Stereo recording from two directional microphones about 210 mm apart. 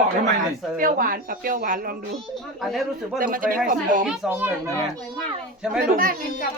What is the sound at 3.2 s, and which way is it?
Speech, 40° right (ahead or behind).